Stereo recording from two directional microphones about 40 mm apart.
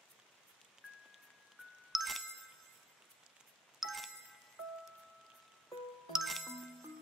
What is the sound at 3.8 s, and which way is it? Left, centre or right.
Music, centre.